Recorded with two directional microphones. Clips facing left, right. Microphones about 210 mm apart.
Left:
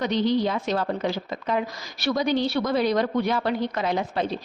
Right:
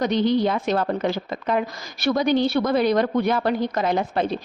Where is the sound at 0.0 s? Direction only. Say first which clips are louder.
Right 3 dB; 55° right (ahead or behind).